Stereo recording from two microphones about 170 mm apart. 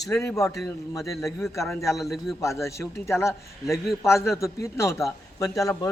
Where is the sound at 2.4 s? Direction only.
15° left (ahead or behind).